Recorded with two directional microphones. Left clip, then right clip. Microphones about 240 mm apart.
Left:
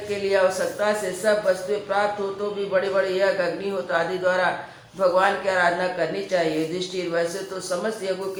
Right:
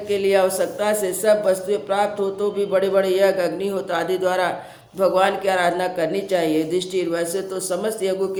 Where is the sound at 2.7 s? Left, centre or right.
Right.